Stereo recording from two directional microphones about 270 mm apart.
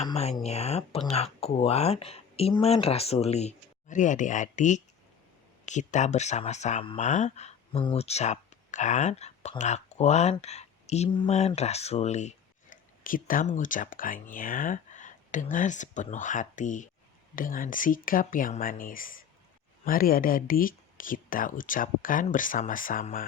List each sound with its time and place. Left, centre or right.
0.0 s speech: left